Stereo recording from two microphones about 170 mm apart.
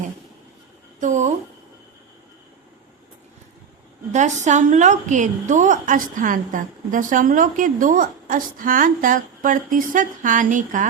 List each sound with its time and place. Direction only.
0.9 s a woman's voice: 45° right (ahead or behind)
4.1 s a woman's voice: 45° right (ahead or behind)